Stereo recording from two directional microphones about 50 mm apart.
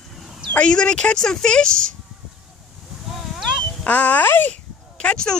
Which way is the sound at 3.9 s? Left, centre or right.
Left.